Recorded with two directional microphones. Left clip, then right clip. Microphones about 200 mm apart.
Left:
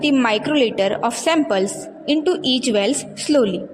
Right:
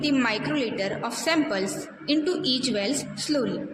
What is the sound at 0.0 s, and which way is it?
A woman's voice, 40° left (ahead or behind).